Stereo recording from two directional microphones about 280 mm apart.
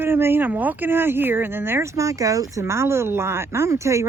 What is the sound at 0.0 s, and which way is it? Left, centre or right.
Speech, centre.